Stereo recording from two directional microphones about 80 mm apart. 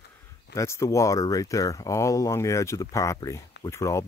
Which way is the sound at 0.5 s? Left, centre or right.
Left.